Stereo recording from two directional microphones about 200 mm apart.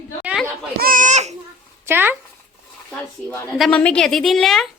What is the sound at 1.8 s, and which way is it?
Speech, 10° right (ahead or behind).